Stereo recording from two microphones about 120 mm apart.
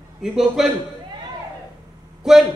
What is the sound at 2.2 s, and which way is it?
Speech, 5° right (ahead or behind).